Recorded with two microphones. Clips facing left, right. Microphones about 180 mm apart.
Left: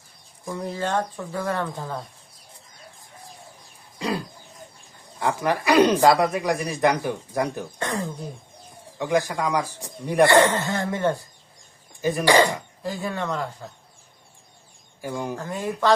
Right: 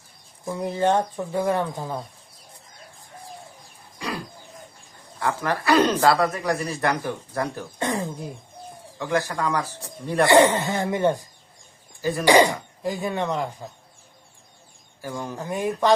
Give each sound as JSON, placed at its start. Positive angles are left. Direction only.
{"t": 0.4, "sound": "speech", "side_deg": -15}
{"t": 3.9, "sound": "a sound", "side_deg": 25}
{"t": 5.2, "sound": "speech", "side_deg": 20}
{"t": 7.8, "sound": "speech", "side_deg": -15}
{"t": 9.0, "sound": "speech", "side_deg": 15}
{"t": 10.2, "sound": "speech", "side_deg": -15}
{"t": 12.2, "sound": "speech", "side_deg": -15}
{"t": 15.0, "sound": "speech", "side_deg": 15}
{"t": 15.4, "sound": "speech", "side_deg": -15}